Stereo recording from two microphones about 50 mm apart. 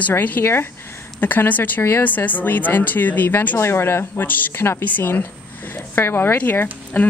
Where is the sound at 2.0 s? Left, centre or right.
Left.